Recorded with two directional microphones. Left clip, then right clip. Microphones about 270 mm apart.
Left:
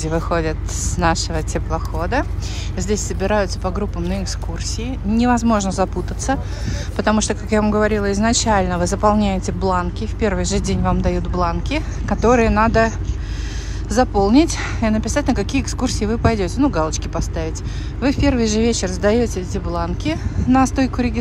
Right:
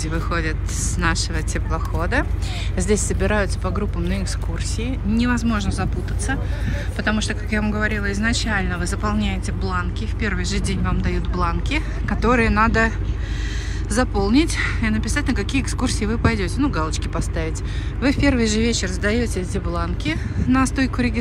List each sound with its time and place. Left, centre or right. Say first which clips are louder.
0.0 s speech: left 5 dB; centre